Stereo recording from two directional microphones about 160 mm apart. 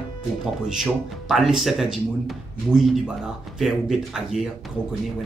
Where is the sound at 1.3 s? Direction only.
Centre (ahead or behind).